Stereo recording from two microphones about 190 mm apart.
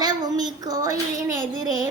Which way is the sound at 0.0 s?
20° right (ahead or behind).